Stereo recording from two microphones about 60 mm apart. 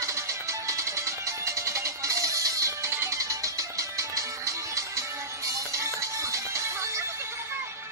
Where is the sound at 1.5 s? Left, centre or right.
Right.